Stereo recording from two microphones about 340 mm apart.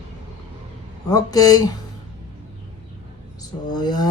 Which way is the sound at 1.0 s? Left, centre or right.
Centre.